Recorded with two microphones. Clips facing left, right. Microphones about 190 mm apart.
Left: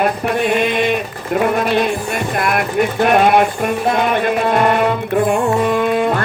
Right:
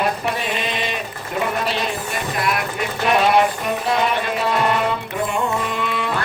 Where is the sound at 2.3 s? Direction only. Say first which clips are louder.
Left 7 dB; 55° left (ahead or behind).